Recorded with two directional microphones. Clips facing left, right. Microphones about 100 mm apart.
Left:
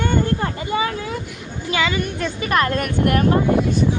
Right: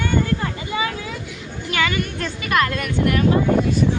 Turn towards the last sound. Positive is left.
turn(degrees=45)  # may be behind; listen again after turning